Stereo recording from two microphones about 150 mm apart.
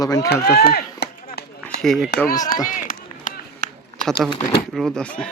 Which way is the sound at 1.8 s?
5° left (ahead or behind).